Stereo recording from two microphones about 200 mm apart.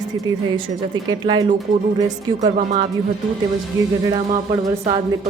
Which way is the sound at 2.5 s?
35° right (ahead or behind).